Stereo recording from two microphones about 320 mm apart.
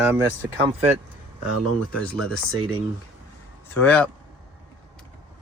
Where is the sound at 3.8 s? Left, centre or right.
Centre.